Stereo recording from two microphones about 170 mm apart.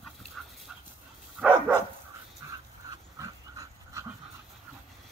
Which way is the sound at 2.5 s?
20° right (ahead or behind).